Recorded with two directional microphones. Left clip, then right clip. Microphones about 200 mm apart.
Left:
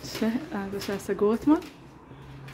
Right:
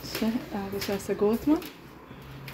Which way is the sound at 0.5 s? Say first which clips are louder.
Right 1 dB; 15° left (ahead or behind).